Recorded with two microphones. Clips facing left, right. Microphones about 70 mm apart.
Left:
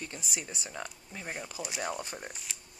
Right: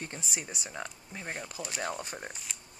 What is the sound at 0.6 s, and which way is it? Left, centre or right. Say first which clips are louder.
Speech: right 1 dB; centre.